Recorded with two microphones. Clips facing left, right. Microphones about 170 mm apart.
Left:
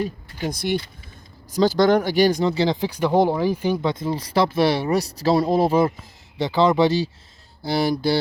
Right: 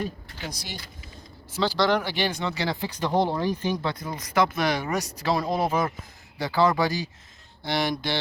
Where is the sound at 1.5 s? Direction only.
40° left (ahead or behind).